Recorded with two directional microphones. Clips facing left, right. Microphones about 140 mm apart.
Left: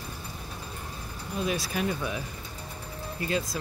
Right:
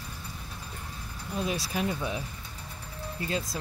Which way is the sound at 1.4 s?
25° right (ahead or behind).